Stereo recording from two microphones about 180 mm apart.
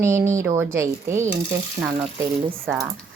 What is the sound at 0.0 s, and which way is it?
Speech, 15° right (ahead or behind).